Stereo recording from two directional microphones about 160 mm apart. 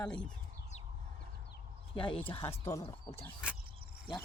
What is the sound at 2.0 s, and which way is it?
Speech, 30° left (ahead or behind).